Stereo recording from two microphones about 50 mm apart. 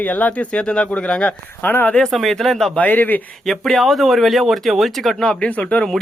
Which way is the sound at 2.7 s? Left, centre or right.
Left.